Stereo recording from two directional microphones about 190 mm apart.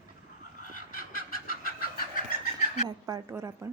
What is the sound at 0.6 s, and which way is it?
Fowl, 45° left (ahead or behind).